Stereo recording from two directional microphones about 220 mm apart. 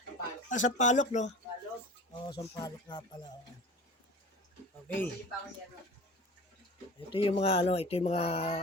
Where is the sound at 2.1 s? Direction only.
20° left (ahead or behind).